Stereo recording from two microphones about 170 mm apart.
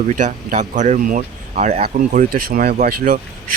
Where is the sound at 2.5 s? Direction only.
55° right (ahead or behind).